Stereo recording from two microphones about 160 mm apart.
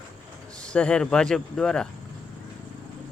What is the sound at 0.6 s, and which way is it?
Speech, 5° left (ahead or behind).